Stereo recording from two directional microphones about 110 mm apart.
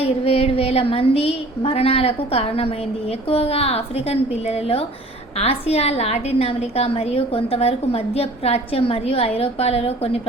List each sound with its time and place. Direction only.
0.0 s a woman's voice: 65° left (ahead or behind)